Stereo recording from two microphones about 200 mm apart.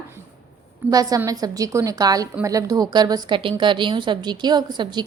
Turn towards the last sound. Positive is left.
turn(degrees=-20)  # may be behind; listen again after turning